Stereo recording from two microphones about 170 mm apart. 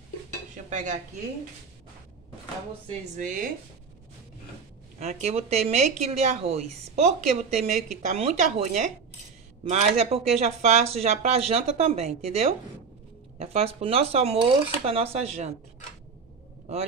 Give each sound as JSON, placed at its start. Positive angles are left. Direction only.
{"t": 0.7, "sound": "dishes", "side_deg": -45}
{"t": 2.9, "sound": "speech", "side_deg": -50}
{"t": 4.9, "sound": "speech", "side_deg": -40}